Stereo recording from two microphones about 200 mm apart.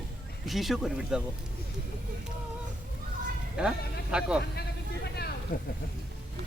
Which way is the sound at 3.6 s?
5° right (ahead or behind).